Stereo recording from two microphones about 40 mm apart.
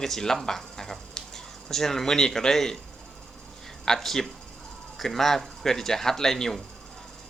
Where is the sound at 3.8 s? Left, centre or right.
Centre.